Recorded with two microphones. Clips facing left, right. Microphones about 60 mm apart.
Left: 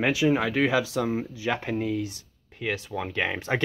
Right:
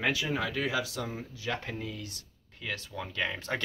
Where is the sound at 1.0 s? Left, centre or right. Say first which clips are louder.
Left 10 dB; left.